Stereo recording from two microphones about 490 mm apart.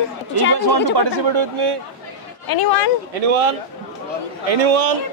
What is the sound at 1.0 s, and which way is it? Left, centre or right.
Speech, right.